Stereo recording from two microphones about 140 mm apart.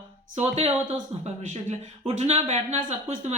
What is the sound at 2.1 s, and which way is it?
Speech, 50° right (ahead or behind).